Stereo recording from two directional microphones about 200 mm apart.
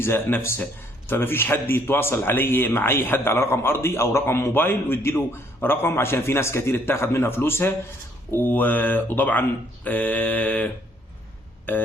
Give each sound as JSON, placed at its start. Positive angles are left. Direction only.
{"t": 0.0, "sound": "a man's voice", "side_deg": 10}
{"t": 11.7, "sound": "a man's voice", "side_deg": 10}